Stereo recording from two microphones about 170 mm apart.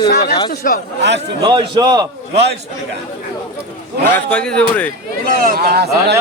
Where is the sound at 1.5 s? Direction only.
25° right (ahead or behind).